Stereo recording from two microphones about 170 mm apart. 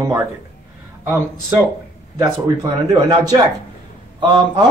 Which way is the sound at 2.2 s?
20° right (ahead or behind).